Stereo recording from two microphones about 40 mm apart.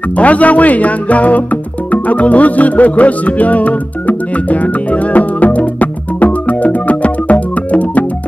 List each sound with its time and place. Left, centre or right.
0.2 s speech: left
1.9 s music: left